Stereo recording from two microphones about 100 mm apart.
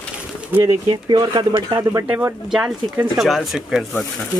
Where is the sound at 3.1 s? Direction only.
Centre (ahead or behind).